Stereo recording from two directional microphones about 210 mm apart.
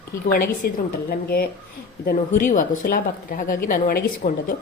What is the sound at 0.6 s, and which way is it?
A woman's voice, 45° left (ahead or behind).